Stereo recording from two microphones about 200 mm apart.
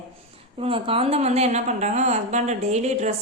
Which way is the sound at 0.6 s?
30° right (ahead or behind).